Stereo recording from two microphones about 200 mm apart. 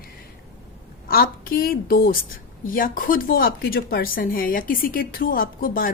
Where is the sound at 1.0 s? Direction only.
45° left (ahead or behind).